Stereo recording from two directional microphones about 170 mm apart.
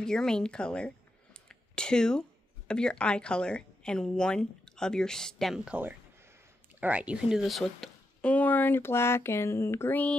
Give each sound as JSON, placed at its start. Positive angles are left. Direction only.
{"t": 0.0, "sound": "a woman's voice", "side_deg": 5}